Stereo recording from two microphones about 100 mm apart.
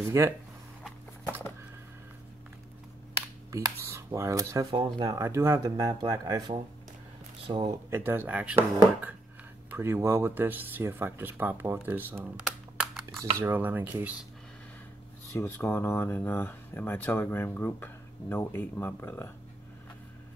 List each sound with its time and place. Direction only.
0.2 s speech: 30° right (ahead or behind)
3.5 s speech: 30° right (ahead or behind)
4.7 s speech: 45° right (ahead or behind)
5.2 s speech: 25° right (ahead or behind)
7.4 s speech: 60° right (ahead or behind)
7.9 s speech: 20° right (ahead or behind)
9.7 s speech: 25° right (ahead or behind)
12.4 s typing: 5° right (ahead or behind)
13.4 s speech: 20° right (ahead or behind)
15.3 s speech: 20° left (ahead or behind)